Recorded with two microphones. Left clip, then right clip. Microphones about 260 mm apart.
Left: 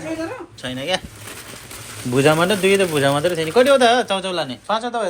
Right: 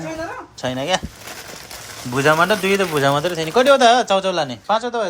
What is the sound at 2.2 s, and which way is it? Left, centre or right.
A man's voice, centre.